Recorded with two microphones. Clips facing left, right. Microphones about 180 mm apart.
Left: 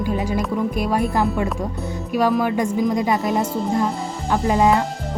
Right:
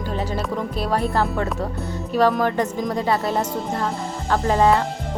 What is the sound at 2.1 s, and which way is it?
Speech, 10° left (ahead or behind).